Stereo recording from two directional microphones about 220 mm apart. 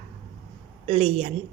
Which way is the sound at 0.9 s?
25° right (ahead or behind).